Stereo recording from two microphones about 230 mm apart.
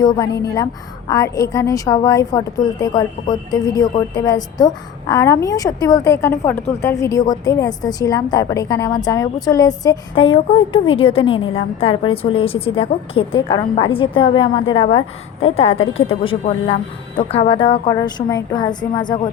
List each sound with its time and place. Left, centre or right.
0.0 s a woman's voice: centre